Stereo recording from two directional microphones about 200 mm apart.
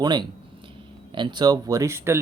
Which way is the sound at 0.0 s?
20° right (ahead or behind).